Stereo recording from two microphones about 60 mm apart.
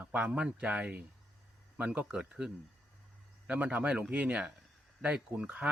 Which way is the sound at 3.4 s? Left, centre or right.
Right.